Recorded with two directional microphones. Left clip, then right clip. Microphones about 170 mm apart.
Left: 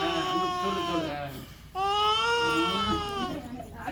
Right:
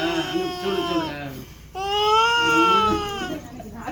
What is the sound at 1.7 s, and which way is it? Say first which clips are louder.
Baby cry: right 6 dB; 10° left (ahead or behind).